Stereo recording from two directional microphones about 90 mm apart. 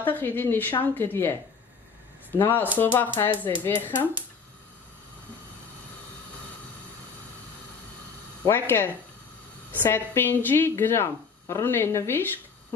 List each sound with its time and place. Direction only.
0.0 s speech: 20° left (ahead or behind)
2.3 s speech: 25° left (ahead or behind)
8.5 s speech: 25° left (ahead or behind)